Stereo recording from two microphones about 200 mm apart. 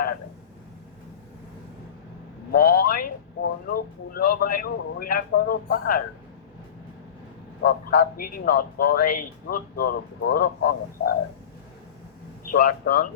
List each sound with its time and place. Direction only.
2.5 s a man's voice: 50° left (ahead or behind)
7.6 s a man's voice: 45° left (ahead or behind)
12.5 s a man's voice: 50° left (ahead or behind)